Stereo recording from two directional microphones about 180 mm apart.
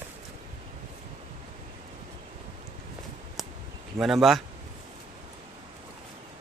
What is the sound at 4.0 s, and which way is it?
Speech, centre (ahead or behind).